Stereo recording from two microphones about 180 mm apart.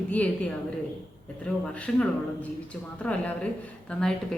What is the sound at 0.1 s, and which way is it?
A woman's voice, 10° left (ahead or behind).